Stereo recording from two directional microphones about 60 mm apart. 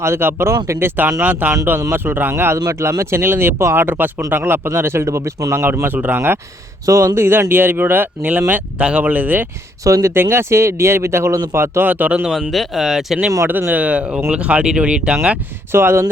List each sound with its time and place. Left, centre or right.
0.0 s speech: right
1.2 s speech: right
2.7 s speech: right
5.0 s speech: right
6.1 s speech: right
6.8 s speech: right
7.2 s speech: right
9.8 s speech: right
10.2 s speech: right
11.9 s speech: right
12.3 s speech: centre
13.7 s speech: right
15.7 s speech: right